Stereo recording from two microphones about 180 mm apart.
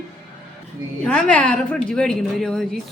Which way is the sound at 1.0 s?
5° left (ahead or behind).